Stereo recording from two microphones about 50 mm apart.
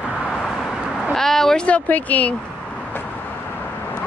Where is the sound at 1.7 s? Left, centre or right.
Left.